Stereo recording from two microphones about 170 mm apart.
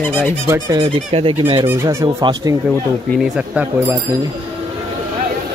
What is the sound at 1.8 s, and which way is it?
Speech, 20° right (ahead or behind).